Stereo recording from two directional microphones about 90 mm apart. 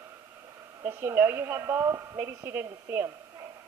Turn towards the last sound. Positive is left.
turn(degrees=-25)  # may be behind; listen again after turning